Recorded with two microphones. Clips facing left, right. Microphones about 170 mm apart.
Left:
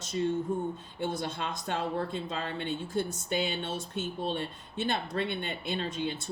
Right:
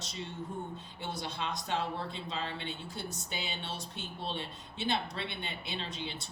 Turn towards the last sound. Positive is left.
turn(degrees=50)  # may be behind; listen again after turning